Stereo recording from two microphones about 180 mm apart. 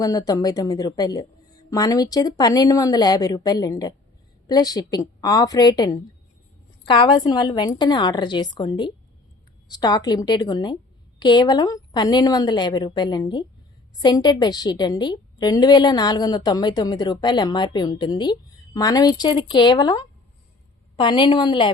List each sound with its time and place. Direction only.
0.0 s a woman's voice: 20° left (ahead or behind)